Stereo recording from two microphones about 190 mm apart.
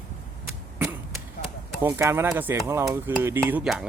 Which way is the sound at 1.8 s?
15° right (ahead or behind).